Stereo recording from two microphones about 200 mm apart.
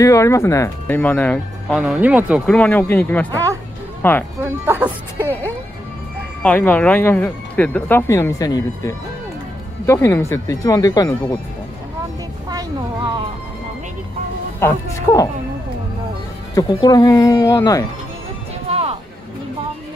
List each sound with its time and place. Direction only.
0.0 s speech: 15° left (ahead or behind)
1.8 s speech: 5° right (ahead or behind)
2.4 s speech: 5° left (ahead or behind)
4.4 s speech: 10° right (ahead or behind)
6.4 s speech: 5° left (ahead or behind)
12.4 s a sound: 20° right (ahead or behind)
14.6 s speech: 15° left (ahead or behind)
16.5 s speech: 20° left (ahead or behind)
18.7 s music: 30° right (ahead or behind)